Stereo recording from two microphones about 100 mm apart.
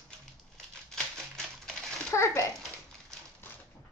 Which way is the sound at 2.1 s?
30° left (ahead or behind).